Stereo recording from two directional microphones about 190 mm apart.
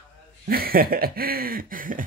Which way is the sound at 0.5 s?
50° right (ahead or behind).